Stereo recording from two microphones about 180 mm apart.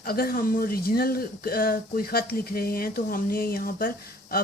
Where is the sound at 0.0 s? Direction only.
55° left (ahead or behind).